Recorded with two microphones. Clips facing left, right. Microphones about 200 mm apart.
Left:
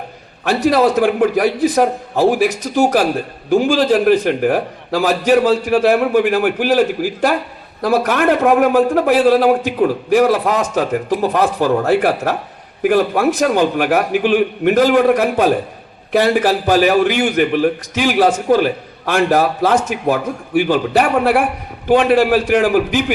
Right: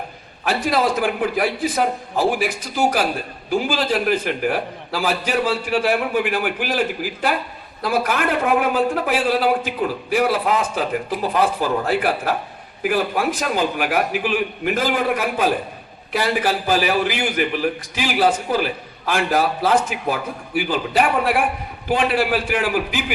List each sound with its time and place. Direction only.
0.4 s a man's voice: 40° left (ahead or behind)